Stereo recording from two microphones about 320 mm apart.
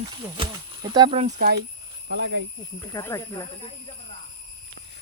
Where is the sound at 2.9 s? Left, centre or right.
Centre.